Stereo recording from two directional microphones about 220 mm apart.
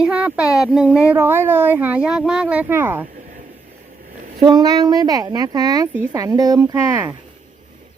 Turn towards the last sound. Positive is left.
turn(degrees=-10)  # may be behind; listen again after turning